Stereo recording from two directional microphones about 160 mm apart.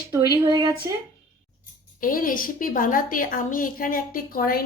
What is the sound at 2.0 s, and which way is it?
A woman's voice, 60° left (ahead or behind).